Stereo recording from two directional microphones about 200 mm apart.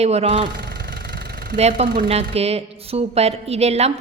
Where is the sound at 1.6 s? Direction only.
35° right (ahead or behind).